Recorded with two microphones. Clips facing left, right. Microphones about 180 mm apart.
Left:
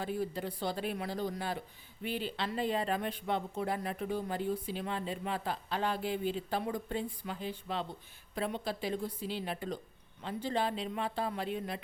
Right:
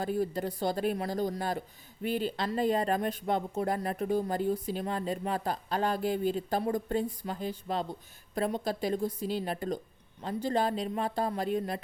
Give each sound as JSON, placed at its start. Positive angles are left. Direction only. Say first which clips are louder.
{"t": 0.0, "sound": "a woman's voice", "louder": "right 5 dB", "side_deg": -45}